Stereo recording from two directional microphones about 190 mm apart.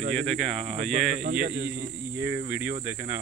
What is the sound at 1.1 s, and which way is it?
Speech, 50° right (ahead or behind).